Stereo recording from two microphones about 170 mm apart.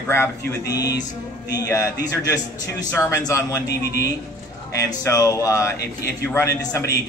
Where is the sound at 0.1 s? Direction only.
15° left (ahead or behind).